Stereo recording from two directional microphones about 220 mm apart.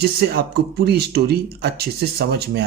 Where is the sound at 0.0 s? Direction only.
45° right (ahead or behind).